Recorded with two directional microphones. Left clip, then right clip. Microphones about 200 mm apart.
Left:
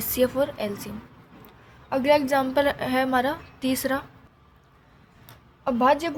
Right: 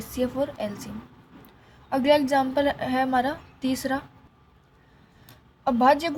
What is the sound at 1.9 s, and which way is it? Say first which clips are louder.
A woman's voice: even; 15° left (ahead or behind).